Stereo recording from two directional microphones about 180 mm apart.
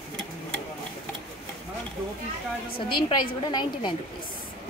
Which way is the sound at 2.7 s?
25° left (ahead or behind).